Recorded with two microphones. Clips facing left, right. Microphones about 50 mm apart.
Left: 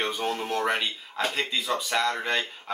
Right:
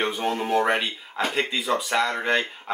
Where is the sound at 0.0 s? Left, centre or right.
Centre.